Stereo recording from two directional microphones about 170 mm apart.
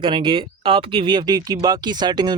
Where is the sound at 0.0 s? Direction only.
30° right (ahead or behind).